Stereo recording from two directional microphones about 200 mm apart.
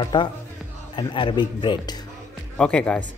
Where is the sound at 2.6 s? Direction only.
5° left (ahead or behind).